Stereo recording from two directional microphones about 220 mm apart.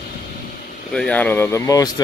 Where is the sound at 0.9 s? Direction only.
5° left (ahead or behind).